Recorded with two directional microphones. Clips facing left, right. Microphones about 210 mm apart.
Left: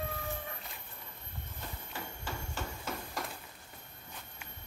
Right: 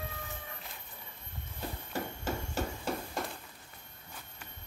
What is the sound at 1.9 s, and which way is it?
Hammer, 40° right (ahead or behind).